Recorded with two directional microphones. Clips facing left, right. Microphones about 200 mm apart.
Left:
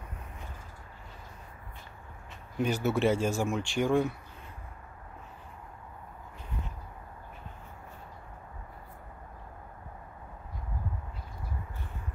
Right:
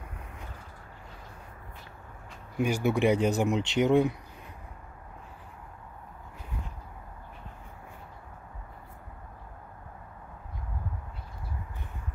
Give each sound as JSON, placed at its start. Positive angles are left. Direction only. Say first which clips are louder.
{"t": 2.5, "sound": "speech", "louder": "right 2 dB", "side_deg": -10}